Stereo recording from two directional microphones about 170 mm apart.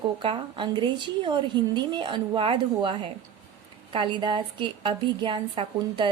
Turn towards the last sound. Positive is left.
turn(degrees=-30)  # may be behind; listen again after turning